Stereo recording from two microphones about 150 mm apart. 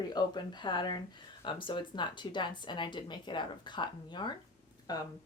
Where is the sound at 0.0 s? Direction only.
30° left (ahead or behind).